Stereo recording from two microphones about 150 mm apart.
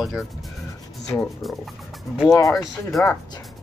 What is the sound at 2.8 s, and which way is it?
Speech, 5° left (ahead or behind).